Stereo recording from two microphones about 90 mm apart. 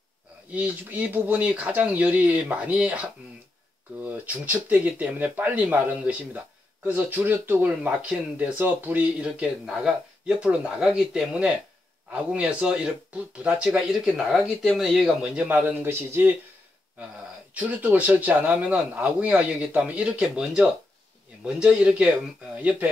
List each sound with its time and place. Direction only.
0.5 s speech: 15° right (ahead or behind)
13.7 s speech: 5° right (ahead or behind)
15.3 s speech: 15° right (ahead or behind)
17.6 s speech: 15° right (ahead or behind)